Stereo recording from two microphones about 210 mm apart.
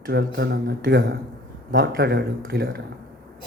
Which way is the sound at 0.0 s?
55° right (ahead or behind).